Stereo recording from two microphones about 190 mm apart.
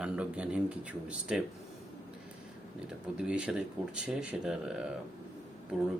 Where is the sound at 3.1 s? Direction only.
5° right (ahead or behind).